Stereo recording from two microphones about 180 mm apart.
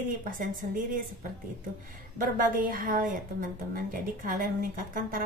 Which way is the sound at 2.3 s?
50° right (ahead or behind).